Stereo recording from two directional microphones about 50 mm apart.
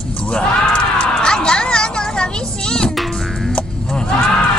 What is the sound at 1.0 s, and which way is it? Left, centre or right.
Music, centre.